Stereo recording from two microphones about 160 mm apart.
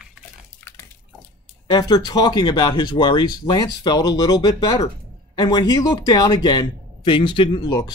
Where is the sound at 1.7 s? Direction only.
25° left (ahead or behind).